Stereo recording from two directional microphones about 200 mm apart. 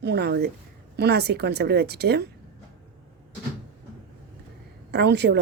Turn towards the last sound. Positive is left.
turn(degrees=-55)  # may be behind; listen again after turning